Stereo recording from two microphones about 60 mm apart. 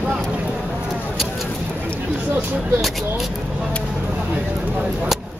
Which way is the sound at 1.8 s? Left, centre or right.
Right.